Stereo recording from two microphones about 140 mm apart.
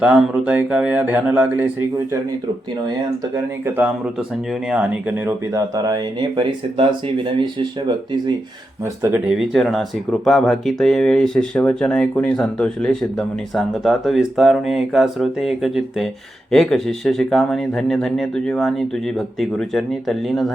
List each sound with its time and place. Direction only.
0.0 s speech: 10° right (ahead or behind)
3.3 s speech: 15° right (ahead or behind)
5.5 s speech: 25° right (ahead or behind)
9.0 s speech: 20° right (ahead or behind)
9.2 s speech: 5° right (ahead or behind)